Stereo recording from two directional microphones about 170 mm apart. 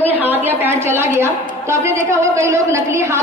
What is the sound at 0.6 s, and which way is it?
A woman's voice, 15° right (ahead or behind).